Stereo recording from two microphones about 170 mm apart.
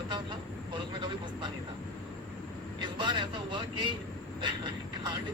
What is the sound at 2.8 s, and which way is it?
Speech, 30° right (ahead or behind).